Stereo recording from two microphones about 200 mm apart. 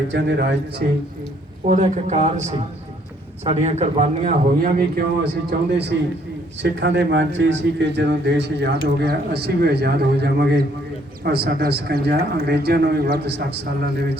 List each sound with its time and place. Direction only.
0.1 s a man's voice: 60° right (ahead or behind)
1.6 s a man's voice: 40° right (ahead or behind)
5.5 s a man's voice: 55° right (ahead or behind)